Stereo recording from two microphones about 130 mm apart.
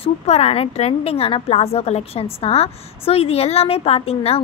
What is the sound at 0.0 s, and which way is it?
Speech, 50° left (ahead or behind).